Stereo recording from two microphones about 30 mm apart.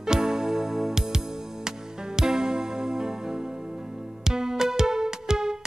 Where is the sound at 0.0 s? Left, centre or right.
Centre.